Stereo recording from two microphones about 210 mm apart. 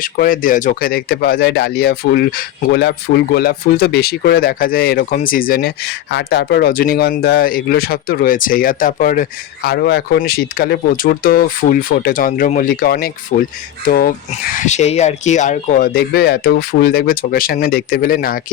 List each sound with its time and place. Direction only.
0.0 s speech: 40° left (ahead or behind)